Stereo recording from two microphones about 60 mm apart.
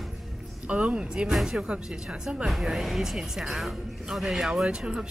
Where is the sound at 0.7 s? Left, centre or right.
Centre.